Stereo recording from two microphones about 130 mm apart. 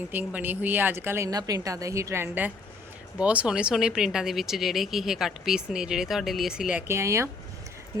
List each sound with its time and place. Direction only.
0.1 s a woman's voice: 15° right (ahead or behind)